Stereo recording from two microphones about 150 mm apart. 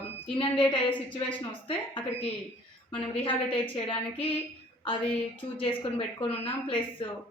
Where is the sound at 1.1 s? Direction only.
35° left (ahead or behind).